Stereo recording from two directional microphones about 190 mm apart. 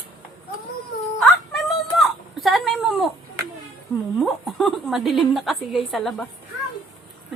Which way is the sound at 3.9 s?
Centre (ahead or behind).